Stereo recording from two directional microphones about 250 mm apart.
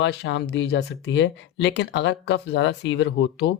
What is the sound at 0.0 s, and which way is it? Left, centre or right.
Speech, left.